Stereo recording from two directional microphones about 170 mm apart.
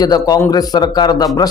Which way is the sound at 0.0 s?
25° left (ahead or behind).